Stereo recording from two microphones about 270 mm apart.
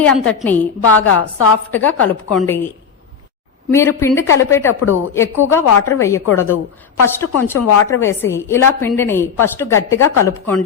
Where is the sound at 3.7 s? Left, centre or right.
Centre.